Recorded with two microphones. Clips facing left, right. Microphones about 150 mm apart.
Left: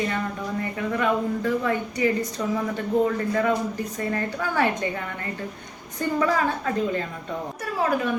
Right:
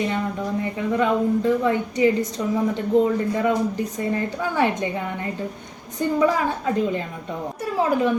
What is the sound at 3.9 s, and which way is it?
A woman's voice, 20° right (ahead or behind).